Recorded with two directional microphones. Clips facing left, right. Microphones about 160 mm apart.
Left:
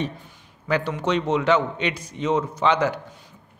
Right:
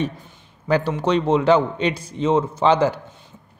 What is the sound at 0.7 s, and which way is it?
A man's voice, 35° right (ahead or behind).